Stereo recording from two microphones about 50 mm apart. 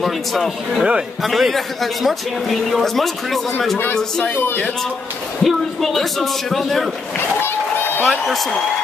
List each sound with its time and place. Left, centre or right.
0.0 s a man's voice: centre
5.4 s a man's voice: centre
7.2 s a sound: left
8.0 s a man's voice: centre